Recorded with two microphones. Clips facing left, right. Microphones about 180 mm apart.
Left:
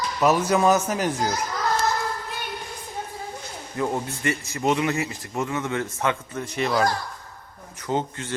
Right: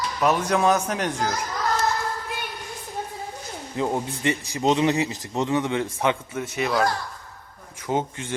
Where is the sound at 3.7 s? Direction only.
15° right (ahead or behind); by 6.9 s centre (ahead or behind).